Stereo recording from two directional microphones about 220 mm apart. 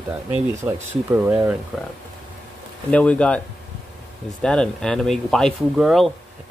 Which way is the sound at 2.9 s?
5° left (ahead or behind).